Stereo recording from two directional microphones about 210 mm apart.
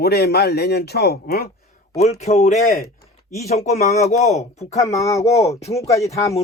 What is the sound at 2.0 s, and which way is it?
Speech, 30° left (ahead or behind).